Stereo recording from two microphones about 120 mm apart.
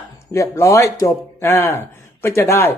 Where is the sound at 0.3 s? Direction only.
25° left (ahead or behind).